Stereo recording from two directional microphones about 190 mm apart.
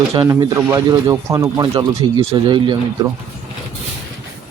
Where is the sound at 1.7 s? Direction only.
30° right (ahead or behind).